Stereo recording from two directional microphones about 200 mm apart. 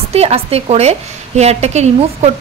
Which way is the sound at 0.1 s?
30° right (ahead or behind).